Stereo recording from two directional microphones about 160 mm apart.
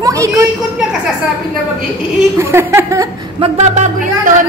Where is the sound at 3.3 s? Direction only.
40° right (ahead or behind).